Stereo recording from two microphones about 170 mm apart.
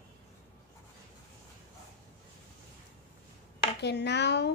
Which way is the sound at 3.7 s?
80° left.